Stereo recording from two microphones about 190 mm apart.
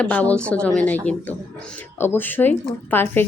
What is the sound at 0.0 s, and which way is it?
Speech, 5° left (ahead or behind).